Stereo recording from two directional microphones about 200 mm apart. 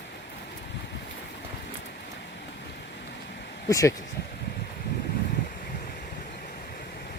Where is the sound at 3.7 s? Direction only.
15° left (ahead or behind).